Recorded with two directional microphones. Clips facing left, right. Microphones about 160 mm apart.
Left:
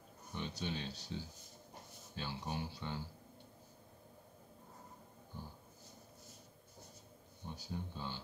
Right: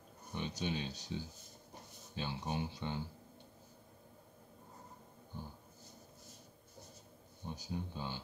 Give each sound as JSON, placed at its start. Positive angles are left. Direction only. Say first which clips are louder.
{"t": 0.3, "sound": "speech", "louder": "right 3 dB", "side_deg": -15}
{"t": 7.4, "sound": "speech", "louder": "right 3 dB", "side_deg": -15}